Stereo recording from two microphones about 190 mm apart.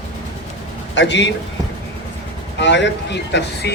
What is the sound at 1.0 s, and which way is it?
Speech, 70° left (ahead or behind).